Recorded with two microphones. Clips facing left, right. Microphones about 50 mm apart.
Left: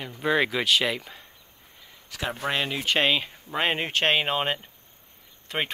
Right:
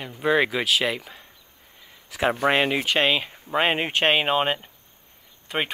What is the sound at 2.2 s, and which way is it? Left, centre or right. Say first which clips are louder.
Speech: right 7 dB; right.